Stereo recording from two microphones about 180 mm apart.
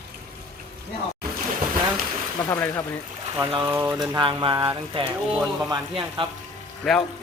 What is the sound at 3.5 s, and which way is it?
Speech, 30° right (ahead or behind).